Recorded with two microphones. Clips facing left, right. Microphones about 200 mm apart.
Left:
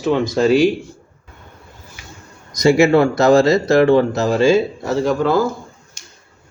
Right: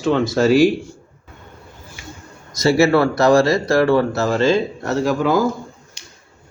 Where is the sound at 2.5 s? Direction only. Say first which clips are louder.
Left 2 dB; 15° left (ahead or behind).